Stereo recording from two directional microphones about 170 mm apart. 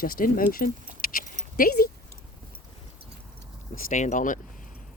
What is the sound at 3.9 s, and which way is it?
Speech, 45° left (ahead or behind).